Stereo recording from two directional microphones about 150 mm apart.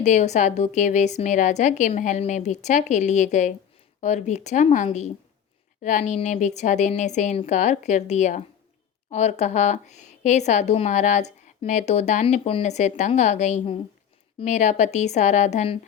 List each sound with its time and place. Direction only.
0.0 s a woman's voice: 50° left (ahead or behind)